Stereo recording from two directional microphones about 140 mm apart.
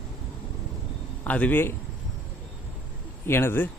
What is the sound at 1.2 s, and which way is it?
Speech, 10° left (ahead or behind).